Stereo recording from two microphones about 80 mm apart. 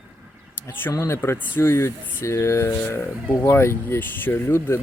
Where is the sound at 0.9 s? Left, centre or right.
Left.